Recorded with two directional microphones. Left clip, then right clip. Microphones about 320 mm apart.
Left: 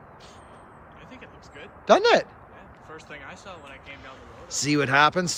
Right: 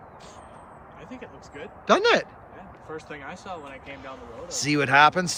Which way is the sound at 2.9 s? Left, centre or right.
Right.